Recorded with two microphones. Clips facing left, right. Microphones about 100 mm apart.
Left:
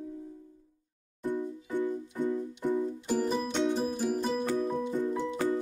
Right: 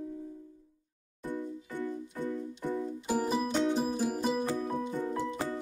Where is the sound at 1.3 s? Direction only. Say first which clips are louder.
Left 4 dB; 20° left (ahead or behind).